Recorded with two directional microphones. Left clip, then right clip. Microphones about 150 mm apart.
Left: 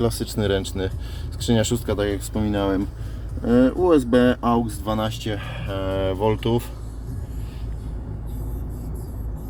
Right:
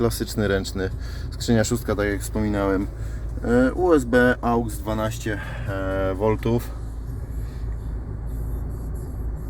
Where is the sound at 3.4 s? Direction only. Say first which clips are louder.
Left 1 dB; 15° left (ahead or behind).